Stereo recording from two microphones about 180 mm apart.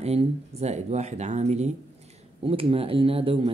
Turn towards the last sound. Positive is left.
turn(degrees=-30)  # may be behind; listen again after turning